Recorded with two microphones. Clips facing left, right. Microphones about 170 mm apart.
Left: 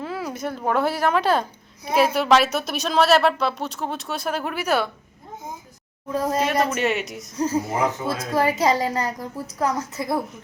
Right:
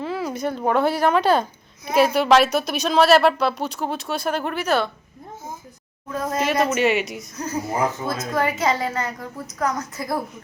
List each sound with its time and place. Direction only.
0.0 s speech: centre (ahead or behind)
6.1 s a woman's voice: 30° left (ahead or behind)
6.4 s speech: 5° right (ahead or behind)
7.3 s a woman's voice: 30° left (ahead or behind)
8.1 s a woman's voice: 10° left (ahead or behind)
8.4 s a woman's voice: 35° left (ahead or behind)